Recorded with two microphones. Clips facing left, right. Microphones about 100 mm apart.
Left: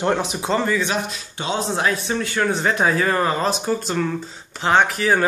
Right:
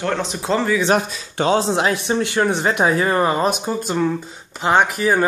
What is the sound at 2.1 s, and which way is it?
Speech, 20° right (ahead or behind).